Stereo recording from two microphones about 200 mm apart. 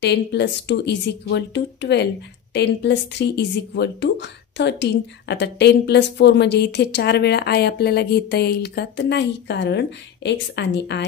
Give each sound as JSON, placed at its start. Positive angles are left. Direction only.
{"t": 0.0, "sound": "speech", "side_deg": 60}